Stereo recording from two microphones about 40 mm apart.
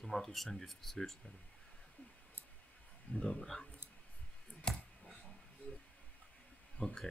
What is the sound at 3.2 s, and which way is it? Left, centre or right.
Speech, centre.